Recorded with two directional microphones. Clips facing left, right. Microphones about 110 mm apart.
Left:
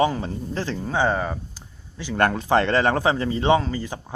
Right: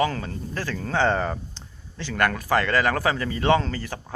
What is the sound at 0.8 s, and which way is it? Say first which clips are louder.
Speech: right 1 dB; 10° left (ahead or behind).